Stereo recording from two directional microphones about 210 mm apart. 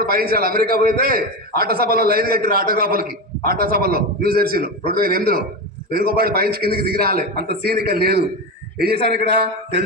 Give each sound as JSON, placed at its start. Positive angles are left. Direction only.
{"t": 0.0, "sound": "a man's voice", "side_deg": -45}